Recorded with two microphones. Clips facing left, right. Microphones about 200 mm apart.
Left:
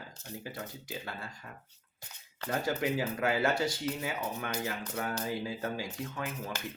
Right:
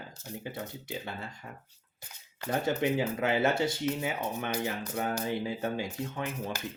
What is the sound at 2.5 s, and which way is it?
Speech, 25° right (ahead or behind).